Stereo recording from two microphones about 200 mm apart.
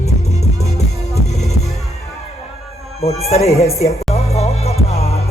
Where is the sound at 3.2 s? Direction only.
30° left (ahead or behind).